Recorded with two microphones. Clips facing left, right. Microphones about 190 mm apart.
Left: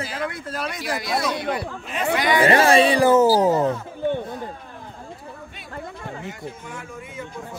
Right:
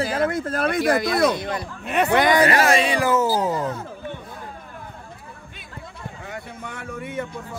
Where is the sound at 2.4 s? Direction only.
30° left (ahead or behind).